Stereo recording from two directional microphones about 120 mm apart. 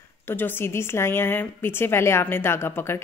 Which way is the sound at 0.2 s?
20° left (ahead or behind).